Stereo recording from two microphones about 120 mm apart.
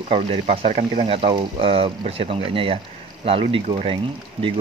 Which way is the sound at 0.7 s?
75° right (ahead or behind).